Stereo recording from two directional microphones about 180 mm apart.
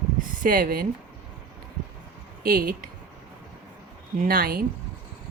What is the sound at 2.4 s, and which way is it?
Speech, 55° right (ahead or behind).